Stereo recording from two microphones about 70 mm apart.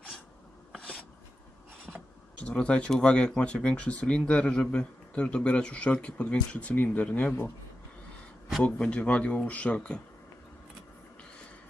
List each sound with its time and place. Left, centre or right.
0.8 s a sound: centre
2.4 s speech: centre
8.6 s speech: centre